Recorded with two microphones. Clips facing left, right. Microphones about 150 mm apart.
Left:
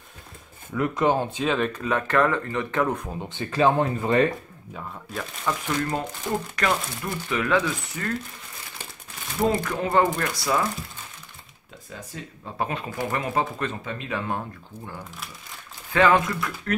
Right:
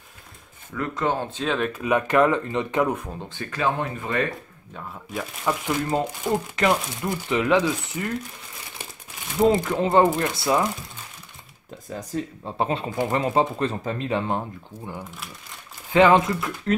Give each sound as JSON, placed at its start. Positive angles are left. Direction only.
{"t": 0.7, "sound": "speech", "side_deg": 15}
{"t": 1.4, "sound": "speech", "side_deg": 0}
{"t": 2.9, "sound": "speech", "side_deg": 0}
{"t": 3.2, "sound": "speech", "side_deg": 20}
{"t": 4.7, "sound": "speech", "side_deg": 0}
{"t": 5.4, "sound": "speech", "side_deg": -15}
{"t": 9.5, "sound": "speech", "side_deg": -20}
{"t": 12.5, "sound": "speech", "side_deg": -25}
{"t": 15.9, "sound": "speech", "side_deg": -20}